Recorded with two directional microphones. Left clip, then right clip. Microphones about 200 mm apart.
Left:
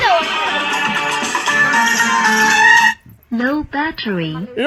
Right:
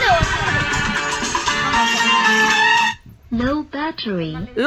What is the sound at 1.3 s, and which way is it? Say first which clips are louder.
Music: left 5 dB; 20° left (ahead or behind).